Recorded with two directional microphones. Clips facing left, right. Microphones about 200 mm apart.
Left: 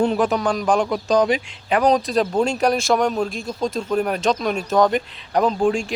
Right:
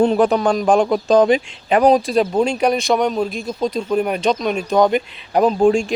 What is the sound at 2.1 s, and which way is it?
Speech, 5° right (ahead or behind).